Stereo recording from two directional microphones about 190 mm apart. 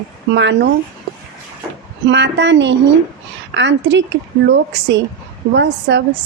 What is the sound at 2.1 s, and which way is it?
A woman's voice, 70° right (ahead or behind).